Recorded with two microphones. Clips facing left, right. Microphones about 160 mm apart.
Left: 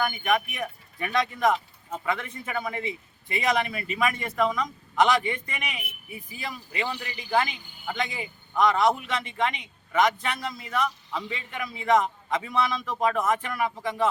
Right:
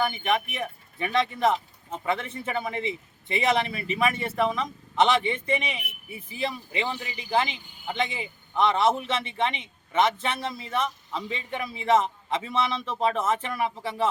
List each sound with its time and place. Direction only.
0.0 s speech: 25° right (ahead or behind)